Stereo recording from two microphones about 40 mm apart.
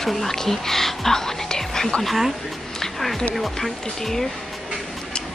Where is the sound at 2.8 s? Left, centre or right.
Centre.